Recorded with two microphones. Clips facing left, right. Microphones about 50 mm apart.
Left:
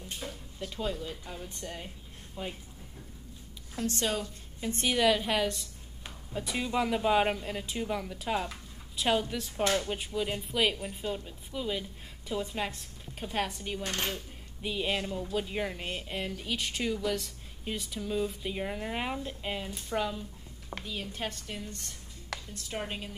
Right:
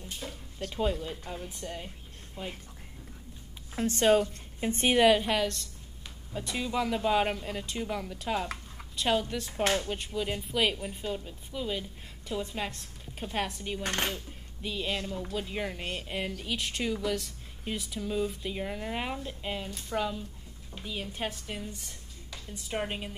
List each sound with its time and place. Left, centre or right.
0.2 s a sound: centre
0.7 s a woman's voice: centre
1.5 s speech: centre
3.7 s a woman's voice: right
5.2 s speech: centre
14.6 s speech: centre
15.3 s speech: centre
20.8 s a woman's voice: centre